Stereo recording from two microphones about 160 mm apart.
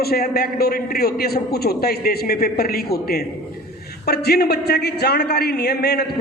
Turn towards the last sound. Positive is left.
turn(degrees=90)